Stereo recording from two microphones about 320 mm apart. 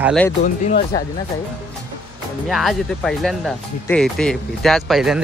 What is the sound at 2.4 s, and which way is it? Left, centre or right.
Speech, centre.